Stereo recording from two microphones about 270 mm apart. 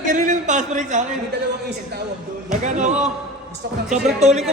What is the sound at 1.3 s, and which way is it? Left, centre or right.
A man's voice, right.